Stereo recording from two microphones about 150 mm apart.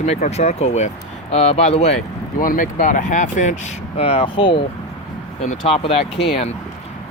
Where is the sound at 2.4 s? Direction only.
65° left (ahead or behind).